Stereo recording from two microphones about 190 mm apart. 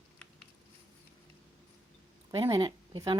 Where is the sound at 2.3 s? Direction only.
25° right (ahead or behind).